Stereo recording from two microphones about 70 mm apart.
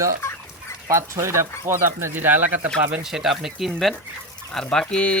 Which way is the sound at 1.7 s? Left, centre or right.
Right.